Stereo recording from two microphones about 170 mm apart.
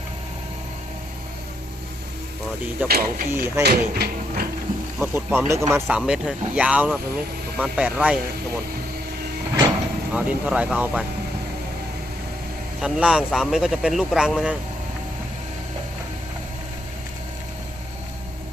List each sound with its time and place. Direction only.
2.8 s speech: 65° right (ahead or behind)
3.2 s speech: 15° right (ahead or behind)
3.6 s speech: 65° right (ahead or behind)
4.9 s speech: 15° right (ahead or behind)
6.0 s speech: 5° right (ahead or behind)
9.6 s speech: 10° right (ahead or behind)
12.8 s speech: 5° right (ahead or behind)